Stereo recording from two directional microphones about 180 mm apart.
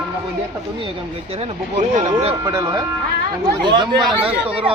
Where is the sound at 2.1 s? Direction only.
25° right (ahead or behind).